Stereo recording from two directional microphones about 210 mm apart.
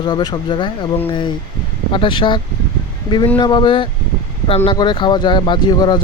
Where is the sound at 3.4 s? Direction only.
20° left (ahead or behind).